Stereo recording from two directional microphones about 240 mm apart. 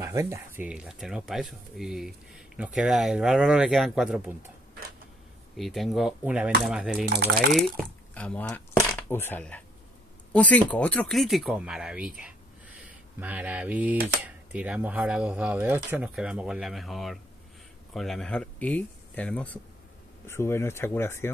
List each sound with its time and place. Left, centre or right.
0.0 s speech: centre
5.6 s speech: centre